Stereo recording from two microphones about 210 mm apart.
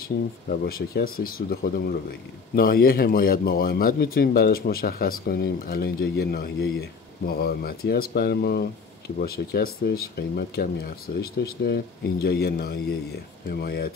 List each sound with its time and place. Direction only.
0.5 s a man's voice: 45° left (ahead or behind)